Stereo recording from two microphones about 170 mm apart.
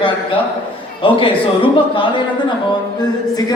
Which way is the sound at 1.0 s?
30° left (ahead or behind).